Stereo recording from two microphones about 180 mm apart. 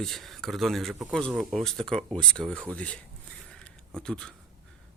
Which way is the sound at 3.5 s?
5° left (ahead or behind).